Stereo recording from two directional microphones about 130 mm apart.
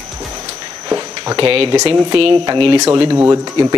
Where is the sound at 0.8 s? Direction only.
25° right (ahead or behind).